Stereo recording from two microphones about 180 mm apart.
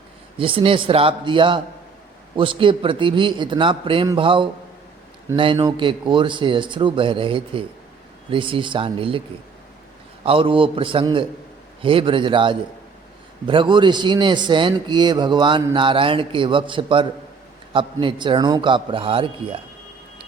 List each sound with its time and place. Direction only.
0.3 s a man's voice: 30° right (ahead or behind)
10.2 s a man's voice: 30° right (ahead or behind)